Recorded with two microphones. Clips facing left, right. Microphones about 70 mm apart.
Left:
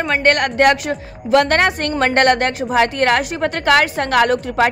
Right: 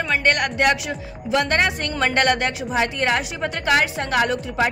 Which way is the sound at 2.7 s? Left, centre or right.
Left.